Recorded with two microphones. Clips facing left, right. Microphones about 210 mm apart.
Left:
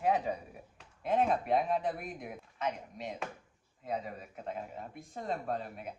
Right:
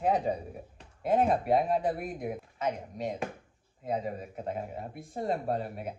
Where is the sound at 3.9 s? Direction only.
40° right (ahead or behind).